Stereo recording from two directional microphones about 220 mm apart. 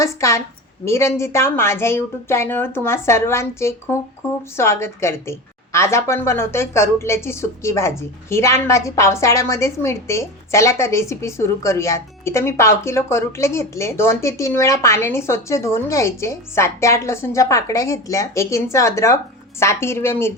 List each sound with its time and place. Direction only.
0.0 s a woman's voice: 15° left (ahead or behind)